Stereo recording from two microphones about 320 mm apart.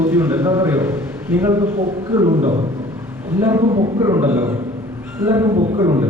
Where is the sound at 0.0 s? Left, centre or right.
Centre.